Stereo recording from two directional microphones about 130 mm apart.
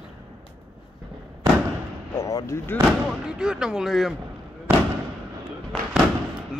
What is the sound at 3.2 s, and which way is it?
Speech, 5° right (ahead or behind).